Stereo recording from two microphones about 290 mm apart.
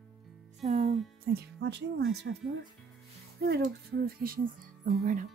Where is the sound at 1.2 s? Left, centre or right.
Right.